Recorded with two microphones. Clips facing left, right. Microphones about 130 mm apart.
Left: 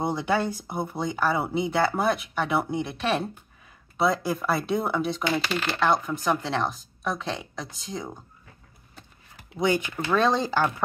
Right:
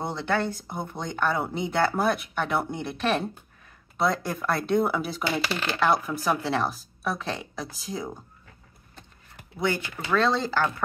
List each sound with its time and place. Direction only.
0.0 s speech: 10° left (ahead or behind)
9.6 s speech: 15° left (ahead or behind)